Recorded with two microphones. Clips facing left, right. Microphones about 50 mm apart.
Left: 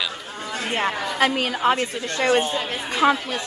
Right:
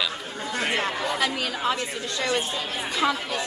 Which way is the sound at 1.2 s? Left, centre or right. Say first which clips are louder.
Left 10 dB; left.